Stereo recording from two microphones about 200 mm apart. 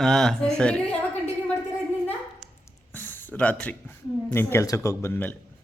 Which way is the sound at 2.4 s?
5° right (ahead or behind).